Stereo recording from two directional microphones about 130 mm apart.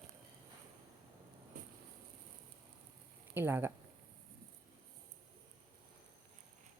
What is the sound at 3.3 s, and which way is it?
Speech, 15° right (ahead or behind).